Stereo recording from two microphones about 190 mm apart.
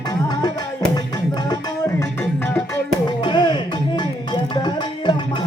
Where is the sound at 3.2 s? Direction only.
25° left (ahead or behind).